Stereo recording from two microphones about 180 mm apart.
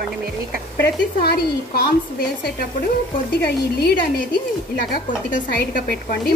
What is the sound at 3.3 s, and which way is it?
Speech, 60° left (ahead or behind).